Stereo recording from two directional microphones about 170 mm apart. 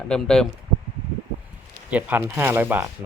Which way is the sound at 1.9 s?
10° right (ahead or behind).